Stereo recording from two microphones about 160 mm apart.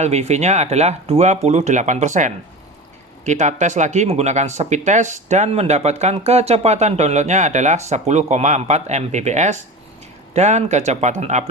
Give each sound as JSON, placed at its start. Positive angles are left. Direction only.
{"t": 0.0, "sound": "speech", "side_deg": -45}